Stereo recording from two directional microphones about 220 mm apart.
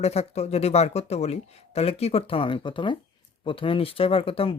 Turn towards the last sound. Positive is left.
turn(degrees=25)  # may be behind; listen again after turning